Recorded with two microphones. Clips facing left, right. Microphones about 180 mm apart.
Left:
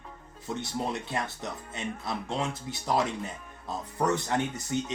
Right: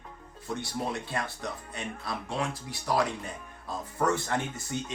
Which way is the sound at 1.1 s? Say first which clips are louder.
Left 1 dB; 20° left (ahead or behind).